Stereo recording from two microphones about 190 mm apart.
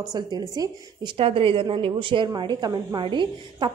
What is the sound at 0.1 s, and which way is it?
A woman's voice, 20° right (ahead or behind).